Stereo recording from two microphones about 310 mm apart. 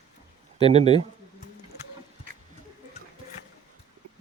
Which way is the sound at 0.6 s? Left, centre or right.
Centre.